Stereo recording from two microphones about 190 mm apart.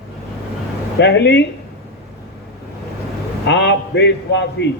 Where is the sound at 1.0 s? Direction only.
65° left (ahead or behind).